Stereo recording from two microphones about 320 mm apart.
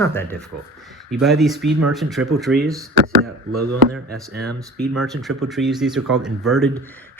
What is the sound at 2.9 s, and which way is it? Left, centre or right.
Speech, right.